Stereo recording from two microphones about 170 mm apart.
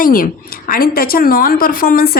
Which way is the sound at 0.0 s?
55° left (ahead or behind).